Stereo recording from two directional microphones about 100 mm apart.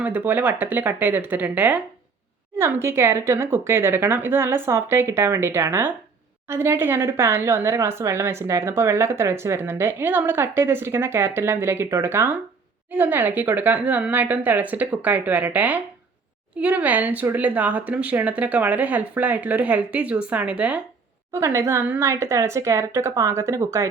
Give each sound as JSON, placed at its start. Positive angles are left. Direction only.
{"t": 0.0, "sound": "speech", "side_deg": -15}
{"t": 2.6, "sound": "speech", "side_deg": -25}
{"t": 21.3, "sound": "speech", "side_deg": -25}